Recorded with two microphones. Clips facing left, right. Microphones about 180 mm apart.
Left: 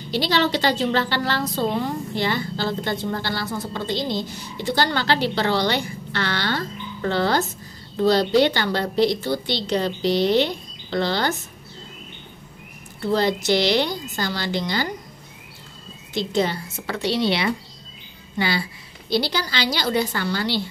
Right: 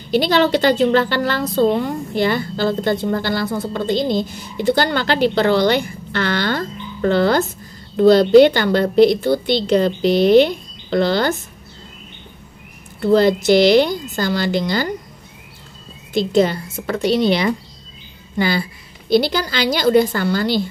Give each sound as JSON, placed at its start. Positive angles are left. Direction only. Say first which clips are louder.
{"t": 0.1, "sound": "a woman's voice", "louder": "right 6 dB", "side_deg": -50}
{"t": 13.0, "sound": "a woman's voice", "louder": "right 7 dB", "side_deg": -50}
{"t": 16.1, "sound": "a woman's voice", "louder": "right 7 dB", "side_deg": -50}
{"t": 19.0, "sound": "a woman's voice", "louder": "right 7 dB", "side_deg": -50}